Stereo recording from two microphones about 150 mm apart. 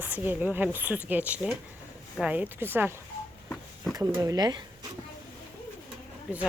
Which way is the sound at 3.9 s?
20° right (ahead or behind).